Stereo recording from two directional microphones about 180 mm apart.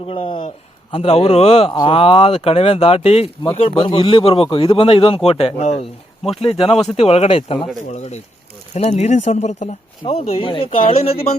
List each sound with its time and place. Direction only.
0.1 s speech: 30° left (ahead or behind)